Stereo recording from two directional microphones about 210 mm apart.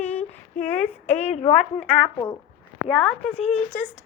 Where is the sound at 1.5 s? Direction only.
5° left (ahead or behind).